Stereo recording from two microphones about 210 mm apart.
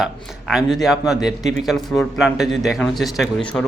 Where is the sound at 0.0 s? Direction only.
Centre (ahead or behind).